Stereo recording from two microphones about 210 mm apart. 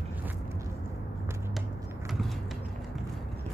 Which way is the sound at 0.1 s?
10° right (ahead or behind).